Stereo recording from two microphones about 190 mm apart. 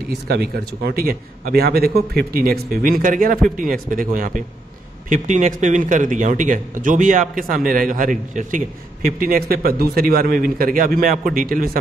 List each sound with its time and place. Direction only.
0.1 s speech: 55° right (ahead or behind)